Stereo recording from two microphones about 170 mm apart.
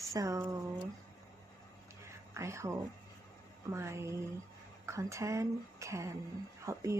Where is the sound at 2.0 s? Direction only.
15° right (ahead or behind).